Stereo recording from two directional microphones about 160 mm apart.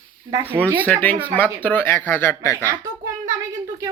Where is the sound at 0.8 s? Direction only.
10° left (ahead or behind).